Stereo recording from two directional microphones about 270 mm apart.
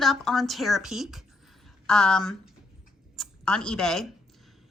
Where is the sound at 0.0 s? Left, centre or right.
Centre.